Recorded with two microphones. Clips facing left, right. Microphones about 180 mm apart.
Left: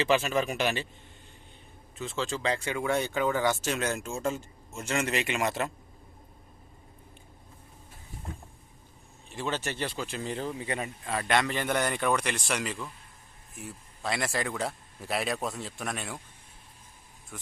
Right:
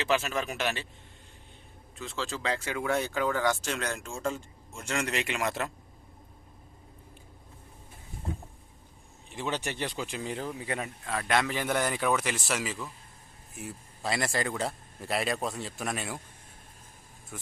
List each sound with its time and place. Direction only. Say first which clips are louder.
0.0 s speech: left 3 dB; centre (ahead or behind)
2.0 s speech: left 3 dB; centre (ahead or behind)
9.3 s speech: even; 15° right (ahead or behind)
17.3 s speech: right 1 dB; centre (ahead or behind)